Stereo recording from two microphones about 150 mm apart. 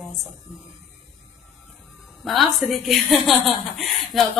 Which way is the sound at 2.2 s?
Centre (ahead or behind).